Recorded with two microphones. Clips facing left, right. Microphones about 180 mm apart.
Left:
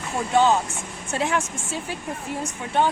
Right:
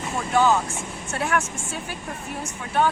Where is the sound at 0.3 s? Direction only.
25° left (ahead or behind).